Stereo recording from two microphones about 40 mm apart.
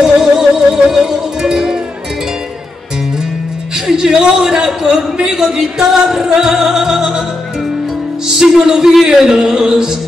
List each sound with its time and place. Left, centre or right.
0.0 s music: centre
3.7 s speech: centre
5.1 s music: centre
8.3 s music: centre